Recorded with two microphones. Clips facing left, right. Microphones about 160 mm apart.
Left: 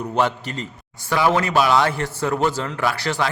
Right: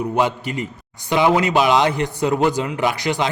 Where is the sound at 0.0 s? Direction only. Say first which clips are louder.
Right 2 dB; 10° right (ahead or behind).